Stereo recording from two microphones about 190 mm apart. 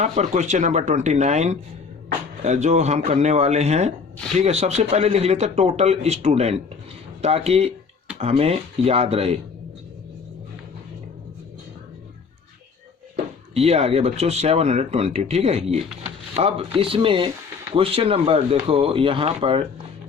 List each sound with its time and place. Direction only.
0.0 s speech: 35° right (ahead or behind)
13.5 s speech: 30° right (ahead or behind)